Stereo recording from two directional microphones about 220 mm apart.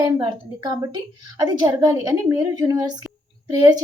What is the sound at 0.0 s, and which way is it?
A woman's voice, 20° right (ahead or behind).